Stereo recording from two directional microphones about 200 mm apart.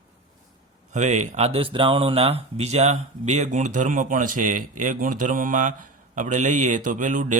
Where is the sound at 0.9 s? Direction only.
35° right (ahead or behind).